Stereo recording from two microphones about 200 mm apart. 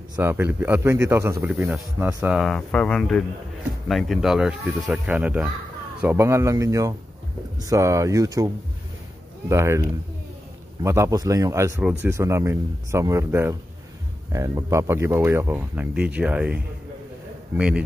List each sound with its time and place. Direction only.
0.1 s speech: 10° right (ahead or behind)
2.3 s speech: centre (ahead or behind); by 8.5 s 15° right (ahead or behind)
9.5 s speech: 15° right (ahead or behind)